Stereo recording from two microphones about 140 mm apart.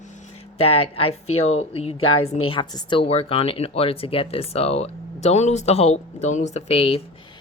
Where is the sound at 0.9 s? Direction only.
45° left (ahead or behind).